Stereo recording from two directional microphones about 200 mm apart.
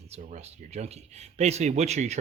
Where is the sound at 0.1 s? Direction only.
35° right (ahead or behind).